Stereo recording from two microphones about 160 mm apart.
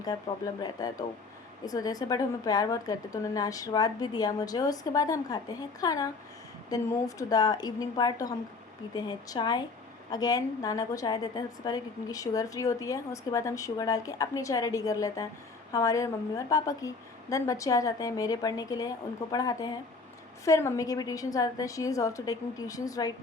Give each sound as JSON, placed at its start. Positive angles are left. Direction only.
{"t": 0.8, "sound": "a woman's voice", "side_deg": 25}